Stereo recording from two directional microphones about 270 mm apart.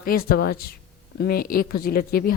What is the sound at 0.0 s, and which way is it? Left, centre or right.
A woman's voice, left.